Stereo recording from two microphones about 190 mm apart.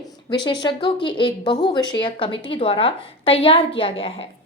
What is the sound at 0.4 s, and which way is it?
Speech, 25° left (ahead or behind).